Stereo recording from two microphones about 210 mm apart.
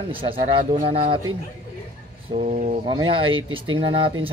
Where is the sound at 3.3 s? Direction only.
70° right (ahead or behind).